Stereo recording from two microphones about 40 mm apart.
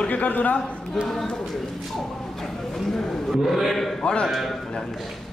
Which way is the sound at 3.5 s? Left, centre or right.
Centre.